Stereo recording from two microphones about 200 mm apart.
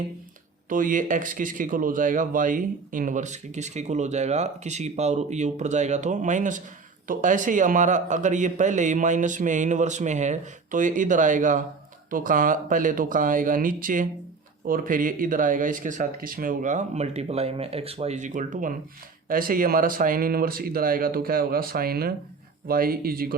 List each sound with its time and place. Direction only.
0.7 s speech: 40° right (ahead or behind)